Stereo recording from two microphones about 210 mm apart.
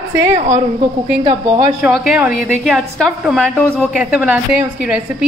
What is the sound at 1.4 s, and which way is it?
Speech, 15° right (ahead or behind).